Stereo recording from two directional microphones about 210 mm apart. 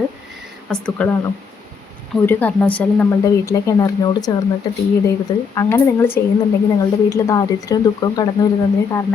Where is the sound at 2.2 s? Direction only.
10° left (ahead or behind).